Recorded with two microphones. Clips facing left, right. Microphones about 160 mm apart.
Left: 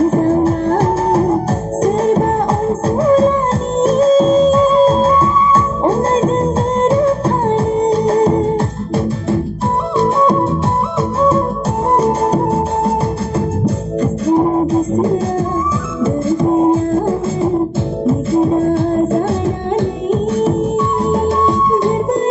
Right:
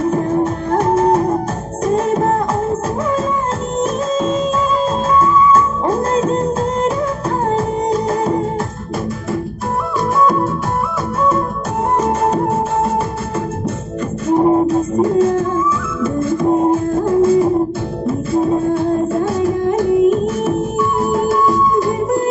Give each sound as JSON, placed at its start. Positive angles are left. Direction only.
{"t": 0.0, "sound": "music", "side_deg": 30}
{"t": 3.8, "sound": "music", "side_deg": 30}
{"t": 14.2, "sound": "music", "side_deg": 30}
{"t": 18.3, "sound": "music", "side_deg": 25}